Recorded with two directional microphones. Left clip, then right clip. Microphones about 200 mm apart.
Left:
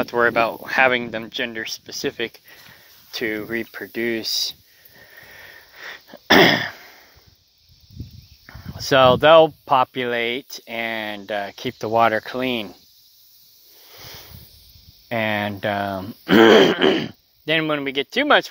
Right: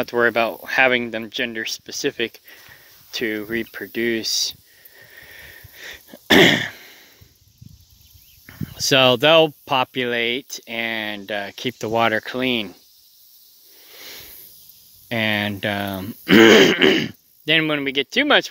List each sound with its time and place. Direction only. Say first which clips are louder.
0.0 s speech: even; 50° right (ahead or behind)
4.9 s a sound: right 1 dB; 35° right (ahead or behind)
8.5 s cricket: right 4 dB; 45° right (ahead or behind)
8.8 s speech: left 1 dB; 40° right (ahead or behind)
13.8 s a sound: right 1 dB; 40° right (ahead or behind)
15.0 s speech: right 1 dB; 40° right (ahead or behind)